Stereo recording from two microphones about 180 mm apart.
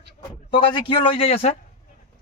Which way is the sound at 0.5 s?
25° left (ahead or behind).